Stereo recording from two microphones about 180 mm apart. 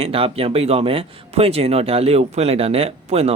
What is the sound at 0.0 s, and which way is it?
Speech, 30° right (ahead or behind).